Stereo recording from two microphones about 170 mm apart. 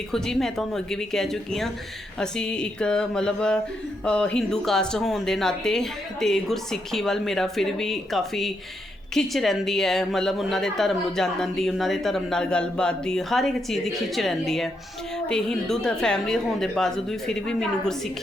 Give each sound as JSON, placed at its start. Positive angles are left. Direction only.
{"t": 0.1, "sound": "speech", "side_deg": 0}